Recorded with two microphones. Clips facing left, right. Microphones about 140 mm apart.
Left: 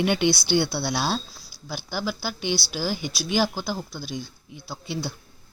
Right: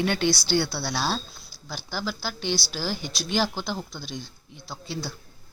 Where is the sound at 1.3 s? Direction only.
Centre (ahead or behind).